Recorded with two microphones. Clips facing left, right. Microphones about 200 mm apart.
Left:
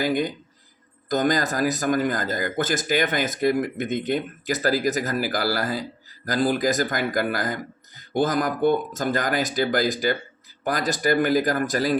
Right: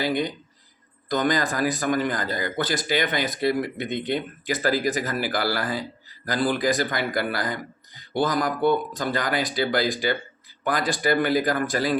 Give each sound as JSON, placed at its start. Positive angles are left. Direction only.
{"t": 0.0, "sound": "speech", "side_deg": 45}